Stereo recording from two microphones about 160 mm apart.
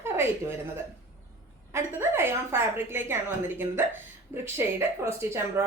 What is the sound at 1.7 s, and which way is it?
Speech, 15° right (ahead or behind).